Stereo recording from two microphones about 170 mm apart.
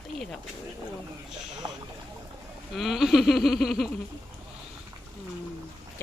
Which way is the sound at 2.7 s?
Centre (ahead or behind).